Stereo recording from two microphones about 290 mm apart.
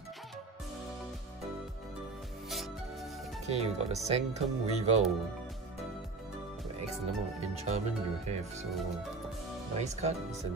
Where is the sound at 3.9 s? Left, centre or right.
Right.